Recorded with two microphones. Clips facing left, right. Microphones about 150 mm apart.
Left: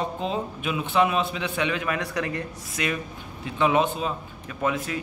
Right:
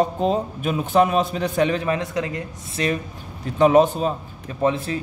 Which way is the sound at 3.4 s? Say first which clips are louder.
Right 7 dB; 40° right (ahead or behind).